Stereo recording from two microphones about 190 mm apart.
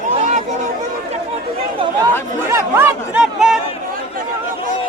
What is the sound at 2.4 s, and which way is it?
Speech, 15° right (ahead or behind).